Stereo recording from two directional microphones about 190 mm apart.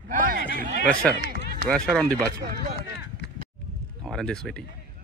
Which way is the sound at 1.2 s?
50° right (ahead or behind).